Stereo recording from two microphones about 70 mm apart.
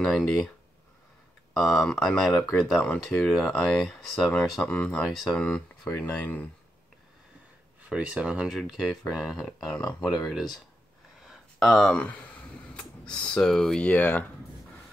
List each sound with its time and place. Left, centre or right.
0.0 s speech: centre
1.6 s speech: centre
4.3 s speech: left
5.9 s speech: left
7.9 s speech: centre
10.2 s speech: centre
11.1 s a sound: centre
12.0 s a sound: centre
13.5 s speech: centre
13.8 s speech: left